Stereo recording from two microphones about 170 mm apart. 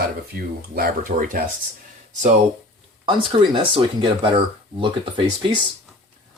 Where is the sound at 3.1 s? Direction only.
30° right (ahead or behind).